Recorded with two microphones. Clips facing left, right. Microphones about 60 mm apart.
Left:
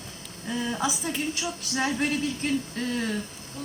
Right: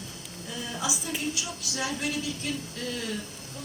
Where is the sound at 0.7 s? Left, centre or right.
Left.